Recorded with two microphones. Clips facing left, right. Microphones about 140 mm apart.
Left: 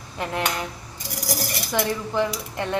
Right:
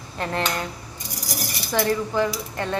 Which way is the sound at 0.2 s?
15° left (ahead or behind).